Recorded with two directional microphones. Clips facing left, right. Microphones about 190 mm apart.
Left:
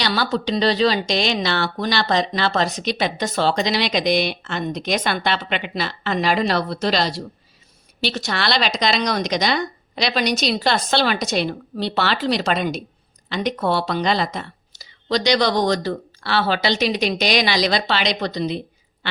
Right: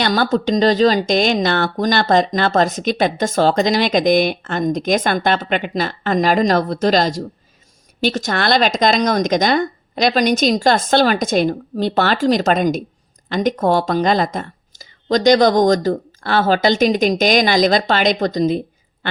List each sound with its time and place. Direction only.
0.0 s speech: 45° right (ahead or behind)